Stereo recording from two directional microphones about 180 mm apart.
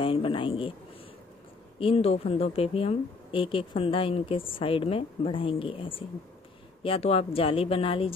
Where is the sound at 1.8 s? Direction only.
35° left (ahead or behind).